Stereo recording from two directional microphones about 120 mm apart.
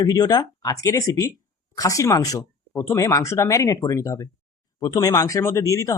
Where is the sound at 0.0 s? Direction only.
35° left (ahead or behind).